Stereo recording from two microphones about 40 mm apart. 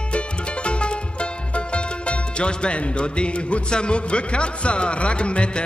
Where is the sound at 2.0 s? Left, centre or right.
Left.